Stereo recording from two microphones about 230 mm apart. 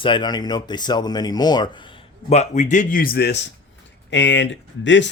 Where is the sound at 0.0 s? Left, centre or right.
Centre.